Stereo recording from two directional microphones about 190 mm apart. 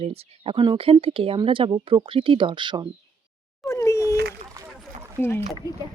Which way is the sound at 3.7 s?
15° left (ahead or behind).